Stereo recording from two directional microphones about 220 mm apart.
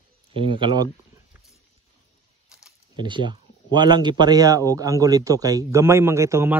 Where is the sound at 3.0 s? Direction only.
20° right (ahead or behind).